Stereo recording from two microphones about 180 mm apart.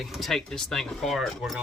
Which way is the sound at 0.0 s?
Centre (ahead or behind).